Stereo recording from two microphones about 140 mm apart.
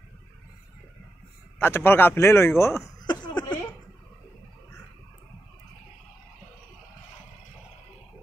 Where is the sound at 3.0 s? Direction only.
30° left (ahead or behind).